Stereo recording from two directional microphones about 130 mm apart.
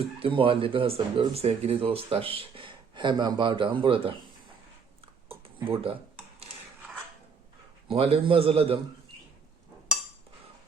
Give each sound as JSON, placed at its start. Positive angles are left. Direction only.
{"t": 0.2, "sound": "speech", "side_deg": -45}
{"t": 5.3, "sound": "typing", "side_deg": -45}
{"t": 7.9, "sound": "speech", "side_deg": -50}